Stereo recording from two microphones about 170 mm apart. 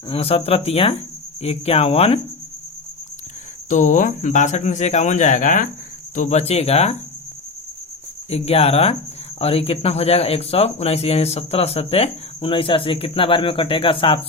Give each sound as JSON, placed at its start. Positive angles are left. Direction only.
{"t": 0.1, "sound": "speech", "side_deg": 35}
{"t": 3.7, "sound": "speech", "side_deg": 45}
{"t": 8.3, "sound": "speech", "side_deg": 35}